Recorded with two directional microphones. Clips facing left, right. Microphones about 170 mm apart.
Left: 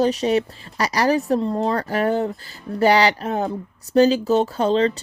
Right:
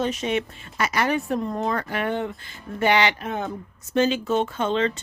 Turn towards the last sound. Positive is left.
turn(degrees=35)  # may be behind; listen again after turning